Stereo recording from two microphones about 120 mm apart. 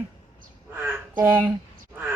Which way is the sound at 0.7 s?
15° right (ahead or behind).